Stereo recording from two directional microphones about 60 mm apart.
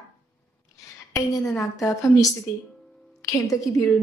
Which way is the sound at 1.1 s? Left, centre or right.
Left.